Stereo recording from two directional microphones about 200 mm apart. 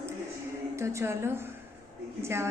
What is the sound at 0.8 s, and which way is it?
Speech, 15° right (ahead or behind).